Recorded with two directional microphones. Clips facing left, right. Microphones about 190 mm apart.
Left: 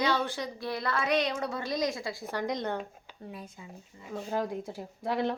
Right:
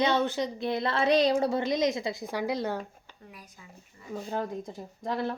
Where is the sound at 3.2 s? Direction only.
25° left (ahead or behind).